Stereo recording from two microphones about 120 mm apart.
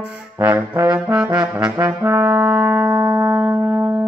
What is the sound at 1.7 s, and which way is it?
Brass instrument, 15° right (ahead or behind).